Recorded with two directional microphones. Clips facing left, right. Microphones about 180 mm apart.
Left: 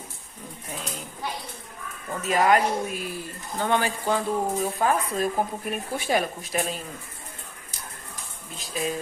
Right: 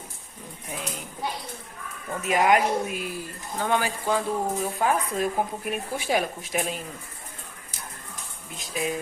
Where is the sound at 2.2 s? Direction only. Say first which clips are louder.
Even; 10° right (ahead or behind).